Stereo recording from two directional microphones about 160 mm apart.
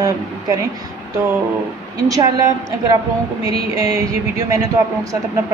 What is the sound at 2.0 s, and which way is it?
Speech, 20° right (ahead or behind).